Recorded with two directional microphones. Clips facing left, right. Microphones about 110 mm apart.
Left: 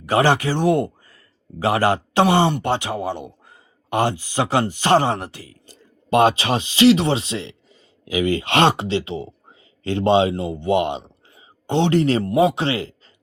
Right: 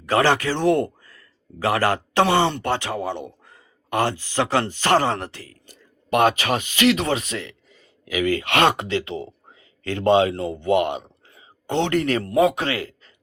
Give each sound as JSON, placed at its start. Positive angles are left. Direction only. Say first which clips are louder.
{"t": 0.0, "sound": "speech", "louder": "left 2 dB", "side_deg": 15}
{"t": 5.6, "sound": "speech", "louder": "left 6 dB", "side_deg": 30}